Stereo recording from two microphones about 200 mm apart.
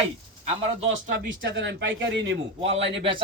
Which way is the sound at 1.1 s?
60° right (ahead or behind).